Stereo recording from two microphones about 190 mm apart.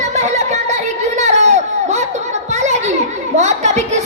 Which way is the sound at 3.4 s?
35° right (ahead or behind).